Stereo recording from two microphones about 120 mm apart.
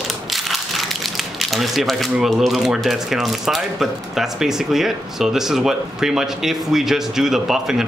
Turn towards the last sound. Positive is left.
turn(degrees=-5)  # may be behind; listen again after turning